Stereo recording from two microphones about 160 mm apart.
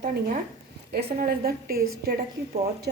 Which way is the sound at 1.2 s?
70° right (ahead or behind).